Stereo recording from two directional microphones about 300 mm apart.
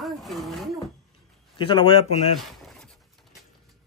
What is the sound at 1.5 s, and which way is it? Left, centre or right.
Speech, centre.